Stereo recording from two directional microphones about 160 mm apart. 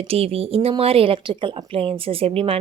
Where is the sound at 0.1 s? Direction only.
40° right (ahead or behind).